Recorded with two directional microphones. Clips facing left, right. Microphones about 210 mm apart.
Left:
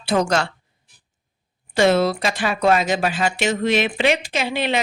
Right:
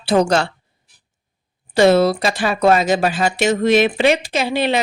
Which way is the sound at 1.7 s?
35° right (ahead or behind).